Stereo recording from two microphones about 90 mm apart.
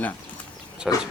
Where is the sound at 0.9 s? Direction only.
Centre (ahead or behind).